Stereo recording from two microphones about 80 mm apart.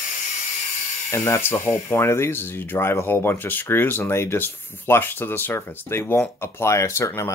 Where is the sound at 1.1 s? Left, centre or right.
Left.